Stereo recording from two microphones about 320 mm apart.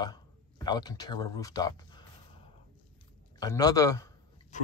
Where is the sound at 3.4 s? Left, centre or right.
Centre.